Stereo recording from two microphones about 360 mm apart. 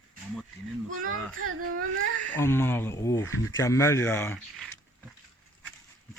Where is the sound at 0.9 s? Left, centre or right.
Right.